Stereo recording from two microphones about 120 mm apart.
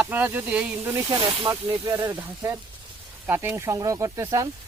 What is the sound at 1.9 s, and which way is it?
Speech, 20° right (ahead or behind).